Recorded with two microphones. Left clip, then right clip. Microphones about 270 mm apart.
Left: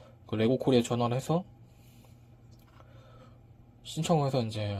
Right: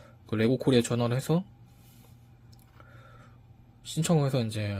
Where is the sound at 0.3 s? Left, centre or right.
Right.